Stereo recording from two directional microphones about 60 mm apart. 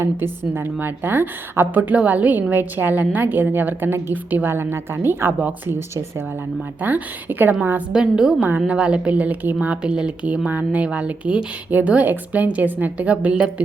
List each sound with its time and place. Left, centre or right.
0.0 s a woman's voice: right
6.8 s a woman's voice: right
7.9 s a woman's voice: centre